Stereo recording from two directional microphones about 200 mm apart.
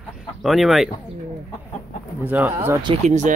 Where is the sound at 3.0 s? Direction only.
35° right (ahead or behind).